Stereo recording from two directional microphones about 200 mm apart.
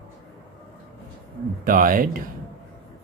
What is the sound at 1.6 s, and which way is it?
Speech, 45° right (ahead or behind).